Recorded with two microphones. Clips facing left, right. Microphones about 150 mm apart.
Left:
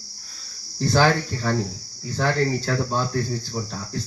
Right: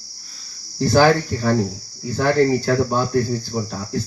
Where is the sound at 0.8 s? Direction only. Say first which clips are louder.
Right 5 dB; 10° right (ahead or behind).